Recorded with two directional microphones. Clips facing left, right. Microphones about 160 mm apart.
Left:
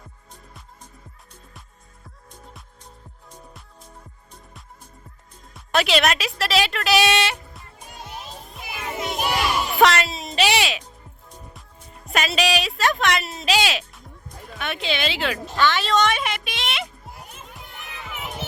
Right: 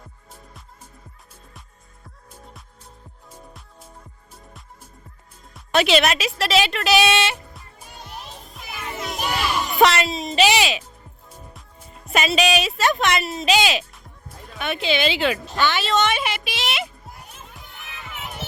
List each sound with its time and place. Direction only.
5.5 s a woman's voice: centre (ahead or behind)
8.8 s crowd: 25° left (ahead or behind)
9.7 s music: centre (ahead or behind)
12.0 s a sound: centre (ahead or behind)